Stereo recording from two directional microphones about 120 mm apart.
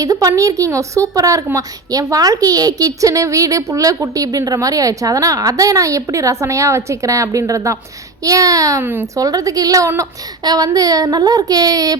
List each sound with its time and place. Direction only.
0.0 s a woman's voice: 30° right (ahead or behind)
8.8 s speech: 15° right (ahead or behind)
9.1 s a woman's voice: 30° right (ahead or behind)